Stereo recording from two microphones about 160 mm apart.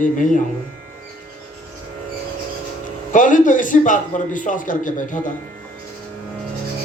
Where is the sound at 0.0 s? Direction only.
55° left (ahead or behind).